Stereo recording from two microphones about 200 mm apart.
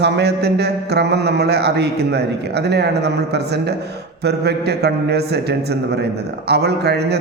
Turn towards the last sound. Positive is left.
turn(degrees=-55)  # may be behind; listen again after turning